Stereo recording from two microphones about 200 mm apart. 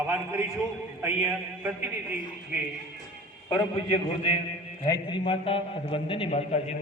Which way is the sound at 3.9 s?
25° left (ahead or behind).